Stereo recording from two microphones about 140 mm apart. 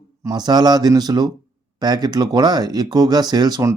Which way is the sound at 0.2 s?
30° right (ahead or behind).